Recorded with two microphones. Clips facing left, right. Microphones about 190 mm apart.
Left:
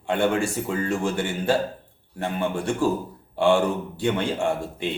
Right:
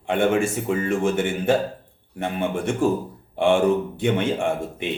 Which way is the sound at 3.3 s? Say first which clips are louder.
Even; 20° right (ahead or behind).